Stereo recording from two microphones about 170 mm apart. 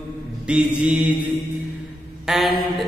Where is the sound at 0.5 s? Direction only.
5° right (ahead or behind).